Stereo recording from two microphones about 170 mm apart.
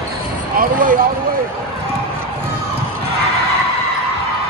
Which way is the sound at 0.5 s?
55° right (ahead or behind).